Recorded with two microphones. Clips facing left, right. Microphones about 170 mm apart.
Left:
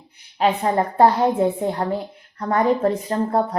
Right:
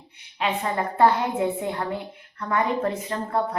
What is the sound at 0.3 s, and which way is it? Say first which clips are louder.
A woman's voice: left 7 dB; 40° left (ahead or behind).